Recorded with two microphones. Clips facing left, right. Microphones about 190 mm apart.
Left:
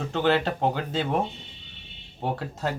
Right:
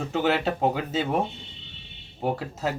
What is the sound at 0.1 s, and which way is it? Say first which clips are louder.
Speech: left 1 dB; 5° right (ahead or behind).